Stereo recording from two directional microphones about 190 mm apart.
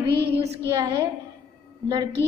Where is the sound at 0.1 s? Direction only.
60° right (ahead or behind).